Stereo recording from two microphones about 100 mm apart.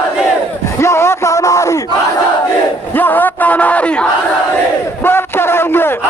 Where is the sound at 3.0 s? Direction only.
20° left (ahead or behind).